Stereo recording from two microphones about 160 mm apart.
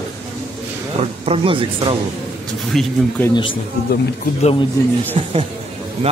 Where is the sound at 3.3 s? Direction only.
30° left (ahead or behind).